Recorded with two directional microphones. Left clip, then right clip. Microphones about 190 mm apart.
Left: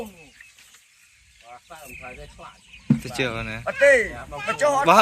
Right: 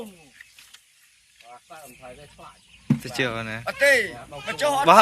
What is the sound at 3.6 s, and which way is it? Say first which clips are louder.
Speech: left 3 dB; 20° left (ahead or behind).